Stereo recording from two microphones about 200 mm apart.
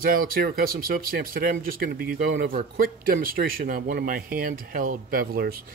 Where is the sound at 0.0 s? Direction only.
45° right (ahead or behind).